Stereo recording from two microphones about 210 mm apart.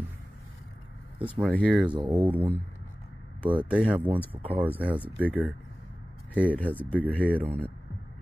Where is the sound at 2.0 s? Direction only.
25° right (ahead or behind).